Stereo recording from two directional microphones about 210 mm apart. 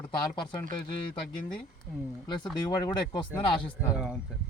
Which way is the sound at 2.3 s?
20° left (ahead or behind).